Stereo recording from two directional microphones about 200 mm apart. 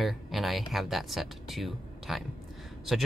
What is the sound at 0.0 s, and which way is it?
Speech, centre (ahead or behind).